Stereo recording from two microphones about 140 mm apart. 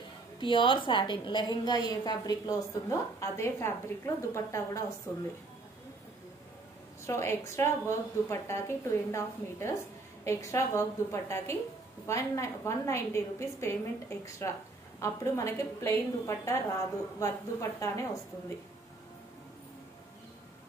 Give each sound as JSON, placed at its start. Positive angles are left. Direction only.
{"t": 0.4, "sound": "a woman's voice", "side_deg": 35}
{"t": 7.1, "sound": "a woman's voice", "side_deg": 20}